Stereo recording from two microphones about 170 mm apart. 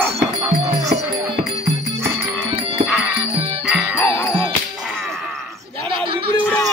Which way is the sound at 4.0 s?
10° left (ahead or behind).